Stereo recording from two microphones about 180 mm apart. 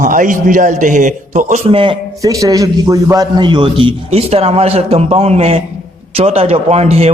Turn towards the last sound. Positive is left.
turn(degrees=-35)  # may be behind; listen again after turning